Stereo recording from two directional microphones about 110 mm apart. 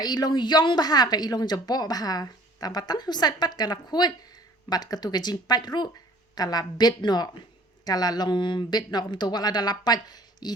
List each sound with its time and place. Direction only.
0.0 s a woman's voice: 40° left (ahead or behind)